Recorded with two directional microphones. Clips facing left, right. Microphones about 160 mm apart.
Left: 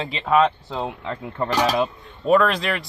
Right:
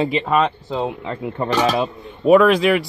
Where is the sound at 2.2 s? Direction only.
5° right (ahead or behind).